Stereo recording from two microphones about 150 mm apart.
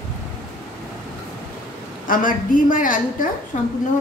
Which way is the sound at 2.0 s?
65° left (ahead or behind).